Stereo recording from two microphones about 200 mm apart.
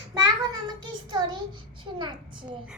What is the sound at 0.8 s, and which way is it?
Child singing, 20° right (ahead or behind).